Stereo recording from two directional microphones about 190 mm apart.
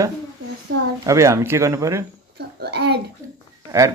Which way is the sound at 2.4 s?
60° right (ahead or behind).